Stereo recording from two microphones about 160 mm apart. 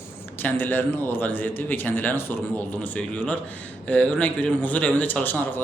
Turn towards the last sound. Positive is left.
turn(degrees=10)  # may be behind; listen again after turning